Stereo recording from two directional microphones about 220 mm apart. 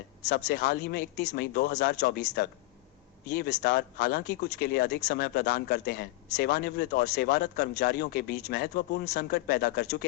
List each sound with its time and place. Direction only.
0.3 s speech: 50° left (ahead or behind)